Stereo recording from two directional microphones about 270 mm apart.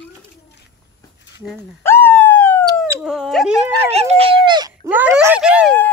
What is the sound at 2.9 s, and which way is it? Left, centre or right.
Speech, centre.